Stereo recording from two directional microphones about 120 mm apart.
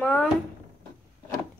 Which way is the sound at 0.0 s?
10° left (ahead or behind).